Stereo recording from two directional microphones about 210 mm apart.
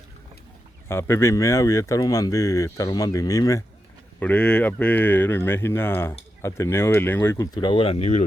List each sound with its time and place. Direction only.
0.9 s speech: 10° left (ahead or behind); by 8.2 s 30° left (ahead or behind)